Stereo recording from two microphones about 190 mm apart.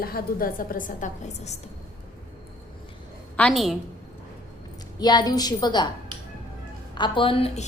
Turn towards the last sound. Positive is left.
turn(degrees=30)  # may be behind; listen again after turning